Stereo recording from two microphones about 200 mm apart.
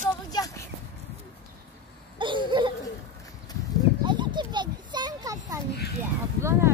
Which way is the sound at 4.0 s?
25° right (ahead or behind).